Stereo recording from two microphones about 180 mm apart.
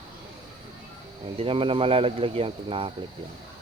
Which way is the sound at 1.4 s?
30° right (ahead or behind).